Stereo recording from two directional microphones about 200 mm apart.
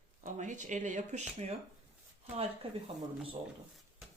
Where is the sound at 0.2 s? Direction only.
40° right (ahead or behind).